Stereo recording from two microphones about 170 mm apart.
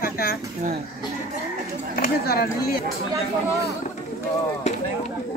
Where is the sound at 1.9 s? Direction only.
60° left (ahead or behind).